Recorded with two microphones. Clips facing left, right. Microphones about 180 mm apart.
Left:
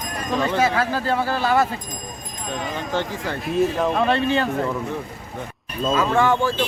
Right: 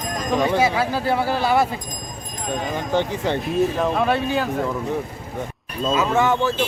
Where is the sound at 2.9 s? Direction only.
20° right (ahead or behind).